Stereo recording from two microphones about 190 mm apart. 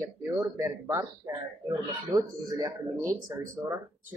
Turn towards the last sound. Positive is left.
turn(degrees=-15)  # may be behind; listen again after turning